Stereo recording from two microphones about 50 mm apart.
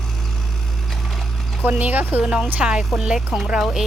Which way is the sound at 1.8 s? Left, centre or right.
Right.